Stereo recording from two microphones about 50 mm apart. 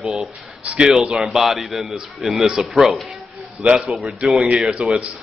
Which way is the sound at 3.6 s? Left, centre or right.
Centre.